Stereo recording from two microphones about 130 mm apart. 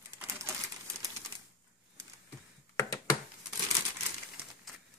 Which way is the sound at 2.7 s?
25° left (ahead or behind).